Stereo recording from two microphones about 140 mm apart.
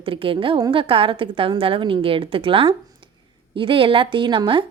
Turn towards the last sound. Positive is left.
turn(degrees=-35)  # may be behind; listen again after turning